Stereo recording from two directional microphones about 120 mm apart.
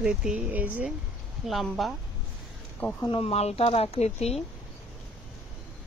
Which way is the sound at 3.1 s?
55° left (ahead or behind).